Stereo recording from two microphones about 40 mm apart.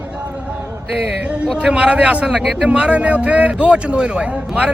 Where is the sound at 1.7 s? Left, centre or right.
Right.